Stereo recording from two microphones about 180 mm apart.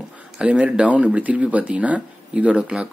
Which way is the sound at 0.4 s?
5° right (ahead or behind).